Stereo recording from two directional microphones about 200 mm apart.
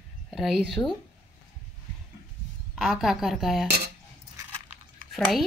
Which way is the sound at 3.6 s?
55° right (ahead or behind).